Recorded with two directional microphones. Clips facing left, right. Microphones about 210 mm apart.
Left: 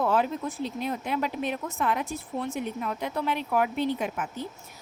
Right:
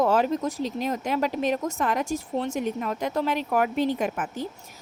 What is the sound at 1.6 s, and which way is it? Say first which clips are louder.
A woman's voice: right 3 dB; 45° right (ahead or behind).